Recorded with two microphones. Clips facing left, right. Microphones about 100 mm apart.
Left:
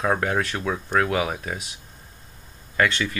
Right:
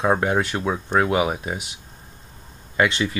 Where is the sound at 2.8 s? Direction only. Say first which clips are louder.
Right 2 dB; 15° right (ahead or behind).